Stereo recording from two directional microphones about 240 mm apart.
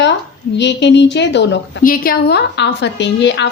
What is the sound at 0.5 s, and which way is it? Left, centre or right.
A woman's voice, left.